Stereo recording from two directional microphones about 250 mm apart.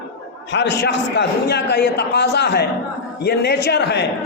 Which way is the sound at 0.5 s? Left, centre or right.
Left.